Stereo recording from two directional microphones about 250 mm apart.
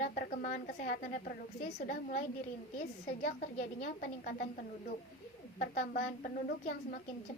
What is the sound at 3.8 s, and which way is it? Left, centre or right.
Speech, left.